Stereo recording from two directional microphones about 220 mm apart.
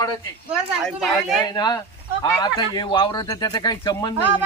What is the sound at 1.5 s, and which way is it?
Speech, 15° left (ahead or behind).